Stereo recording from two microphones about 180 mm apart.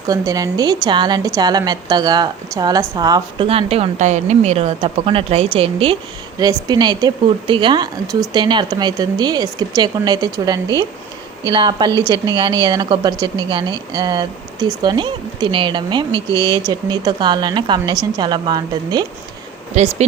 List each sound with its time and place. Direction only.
0.1 s a woman's voice: 20° right (ahead or behind)
19.7 s a woman's voice: 35° right (ahead or behind)